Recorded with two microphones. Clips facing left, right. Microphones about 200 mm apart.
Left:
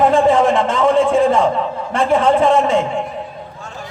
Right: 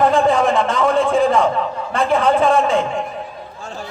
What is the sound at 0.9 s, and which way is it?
Speech, 5° left (ahead or behind).